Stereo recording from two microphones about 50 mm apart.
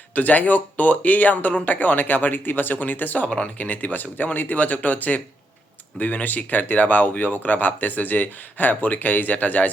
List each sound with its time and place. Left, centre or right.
0.1 s speech: left